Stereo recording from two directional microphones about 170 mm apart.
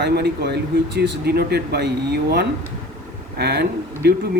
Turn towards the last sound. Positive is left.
turn(degrees=-70)  # may be behind; listen again after turning